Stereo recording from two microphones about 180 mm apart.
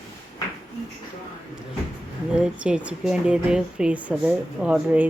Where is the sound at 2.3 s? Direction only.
5° right (ahead or behind).